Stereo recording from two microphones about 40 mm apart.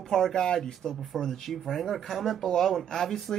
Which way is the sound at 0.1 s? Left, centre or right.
Centre.